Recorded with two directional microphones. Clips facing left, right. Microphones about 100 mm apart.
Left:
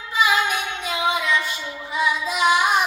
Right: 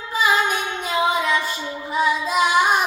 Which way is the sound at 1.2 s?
40° right (ahead or behind).